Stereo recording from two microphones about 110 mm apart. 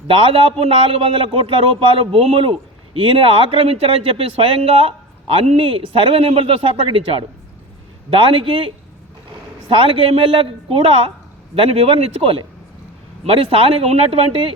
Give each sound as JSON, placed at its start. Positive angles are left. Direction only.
{"t": 0.1, "sound": "a man's voice", "side_deg": -55}